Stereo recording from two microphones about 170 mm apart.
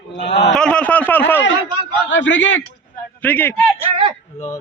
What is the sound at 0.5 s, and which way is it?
Speech, 5° left (ahead or behind).